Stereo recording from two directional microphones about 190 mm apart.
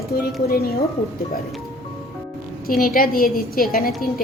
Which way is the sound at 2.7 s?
50° left (ahead or behind).